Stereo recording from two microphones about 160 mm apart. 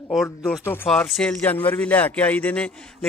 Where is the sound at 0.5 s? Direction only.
15° left (ahead or behind).